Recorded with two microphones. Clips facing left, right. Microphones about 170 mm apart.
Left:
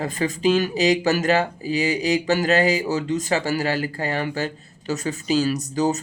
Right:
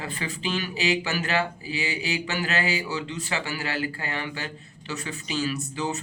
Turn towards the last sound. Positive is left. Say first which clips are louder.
# left 8 dB
turn(degrees=40)  # may be behind; listen again after turning